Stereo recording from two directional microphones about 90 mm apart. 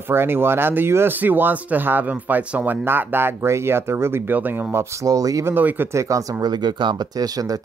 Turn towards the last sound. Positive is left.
turn(degrees=-45)  # may be behind; listen again after turning